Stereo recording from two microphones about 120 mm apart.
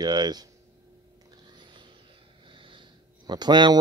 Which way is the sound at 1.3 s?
40° right (ahead or behind).